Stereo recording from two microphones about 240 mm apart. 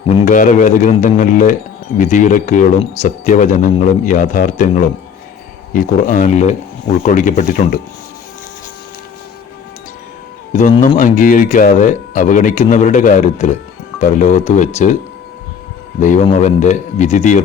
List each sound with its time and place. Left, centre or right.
0.1 s speech: left
10.5 s speech: left
16.0 s a man's voice: left